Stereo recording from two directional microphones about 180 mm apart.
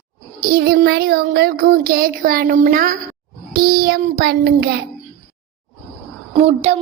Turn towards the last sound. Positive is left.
turn(degrees=-35)  # may be behind; listen again after turning